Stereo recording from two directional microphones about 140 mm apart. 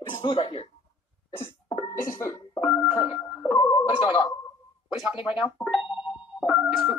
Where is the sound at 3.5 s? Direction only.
15° left (ahead or behind).